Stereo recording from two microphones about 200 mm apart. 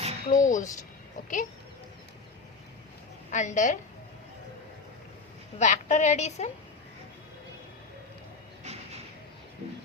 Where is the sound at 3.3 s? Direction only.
40° left (ahead or behind).